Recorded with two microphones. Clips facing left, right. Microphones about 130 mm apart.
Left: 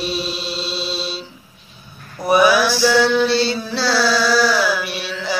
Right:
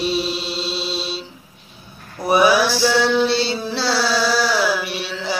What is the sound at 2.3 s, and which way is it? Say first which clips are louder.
Mantra: left 1 dB; 25° right (ahead or behind).